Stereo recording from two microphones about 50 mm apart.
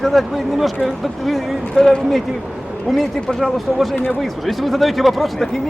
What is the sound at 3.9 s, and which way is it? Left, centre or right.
Speech, left.